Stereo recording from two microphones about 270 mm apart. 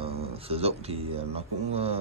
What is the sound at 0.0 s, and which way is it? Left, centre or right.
Speech, right.